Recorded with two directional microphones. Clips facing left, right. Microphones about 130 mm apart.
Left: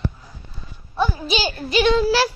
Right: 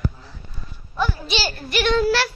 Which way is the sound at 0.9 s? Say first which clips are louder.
Left 2 dB; 20° left (ahead or behind).